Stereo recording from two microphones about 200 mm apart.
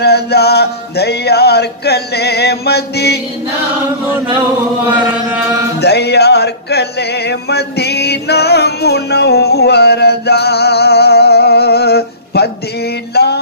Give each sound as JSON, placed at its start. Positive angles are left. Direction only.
{"t": 0.0, "sound": "music", "side_deg": 55}
{"t": 4.9, "sound": "chant", "side_deg": -5}
{"t": 5.8, "sound": "music", "side_deg": 55}